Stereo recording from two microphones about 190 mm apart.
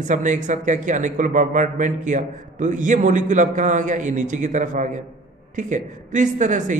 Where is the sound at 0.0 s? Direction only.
40° right (ahead or behind).